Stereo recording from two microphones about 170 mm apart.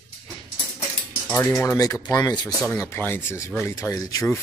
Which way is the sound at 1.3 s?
15° left (ahead or behind).